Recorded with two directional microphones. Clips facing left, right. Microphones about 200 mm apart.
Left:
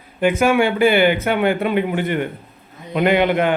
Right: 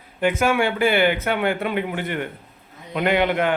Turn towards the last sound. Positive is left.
turn(degrees=20)  # may be behind; listen again after turning